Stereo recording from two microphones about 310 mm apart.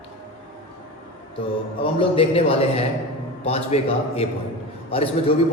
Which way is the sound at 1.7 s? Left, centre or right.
Centre.